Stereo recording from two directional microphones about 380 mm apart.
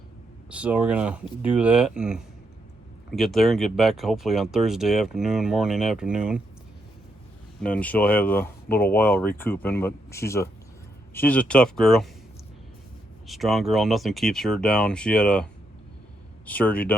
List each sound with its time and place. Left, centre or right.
0.5 s speech: centre
7.6 s speech: centre
13.2 s speech: centre
16.5 s speech: centre